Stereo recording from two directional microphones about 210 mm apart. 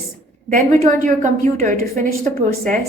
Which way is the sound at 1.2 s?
40° right (ahead or behind).